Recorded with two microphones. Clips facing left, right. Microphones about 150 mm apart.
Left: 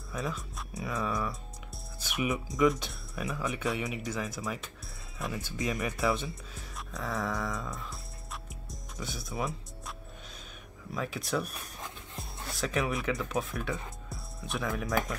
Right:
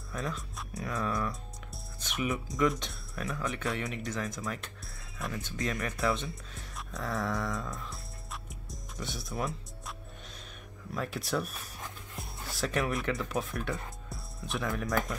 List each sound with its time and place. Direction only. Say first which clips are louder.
0.1 s speech: left 1 dB; centre (ahead or behind)